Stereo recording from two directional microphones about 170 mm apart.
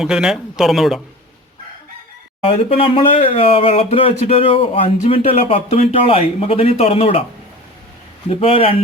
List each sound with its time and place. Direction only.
0.0 s speech: 5° right (ahead or behind)
2.5 s speech: 35° left (ahead or behind)
8.3 s speech: 35° left (ahead or behind)